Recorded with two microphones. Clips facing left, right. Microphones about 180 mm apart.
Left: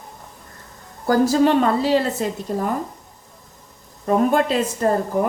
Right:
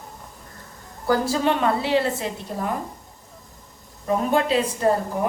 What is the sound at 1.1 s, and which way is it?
A woman's voice, 40° left (ahead or behind).